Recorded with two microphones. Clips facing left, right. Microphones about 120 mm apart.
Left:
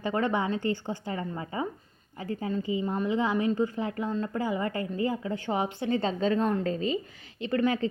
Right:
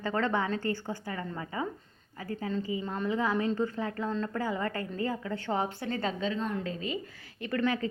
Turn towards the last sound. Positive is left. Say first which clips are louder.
# left 3 dB
turn(degrees=25)  # may be behind; listen again after turning